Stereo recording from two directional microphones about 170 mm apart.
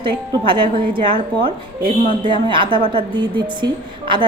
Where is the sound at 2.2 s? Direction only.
30° right (ahead or behind).